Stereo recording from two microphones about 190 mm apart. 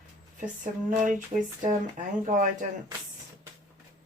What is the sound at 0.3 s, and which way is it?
Speech, 40° right (ahead or behind).